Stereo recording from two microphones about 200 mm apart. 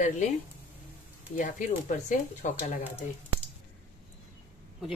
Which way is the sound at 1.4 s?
40° left (ahead or behind).